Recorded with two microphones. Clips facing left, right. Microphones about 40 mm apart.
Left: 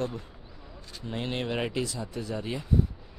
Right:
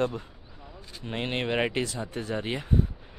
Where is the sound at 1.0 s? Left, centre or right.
Right.